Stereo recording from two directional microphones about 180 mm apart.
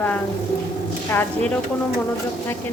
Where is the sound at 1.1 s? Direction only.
10° left (ahead or behind).